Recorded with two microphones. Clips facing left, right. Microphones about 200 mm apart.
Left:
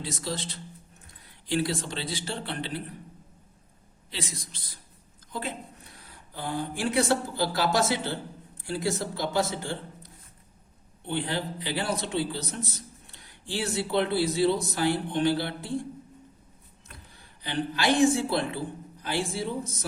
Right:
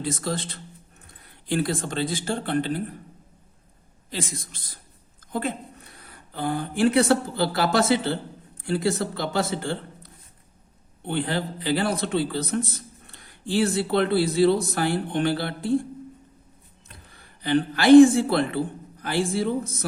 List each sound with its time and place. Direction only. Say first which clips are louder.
0.0 s speech: right 5 dB; 50° right (ahead or behind)
4.1 s a woman's voice: right 5 dB; 50° right (ahead or behind)
17.2 s a man's voice: right 8 dB; 55° right (ahead or behind)